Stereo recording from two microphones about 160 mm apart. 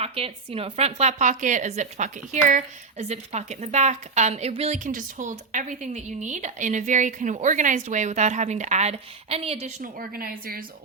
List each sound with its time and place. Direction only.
0.0 s speech: 35° right (ahead or behind)
9.8 s speech: 65° right (ahead or behind)